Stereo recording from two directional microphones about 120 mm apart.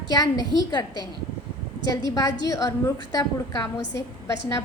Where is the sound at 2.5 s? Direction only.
25° left (ahead or behind).